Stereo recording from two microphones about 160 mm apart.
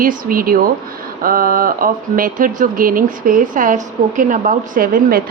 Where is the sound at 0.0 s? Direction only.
60° right (ahead or behind).